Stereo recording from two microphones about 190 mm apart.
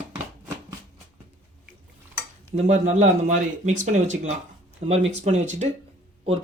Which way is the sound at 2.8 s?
40° right (ahead or behind).